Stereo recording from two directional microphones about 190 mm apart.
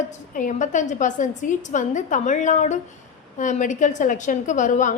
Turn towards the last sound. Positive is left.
turn(degrees=40)  # may be behind; listen again after turning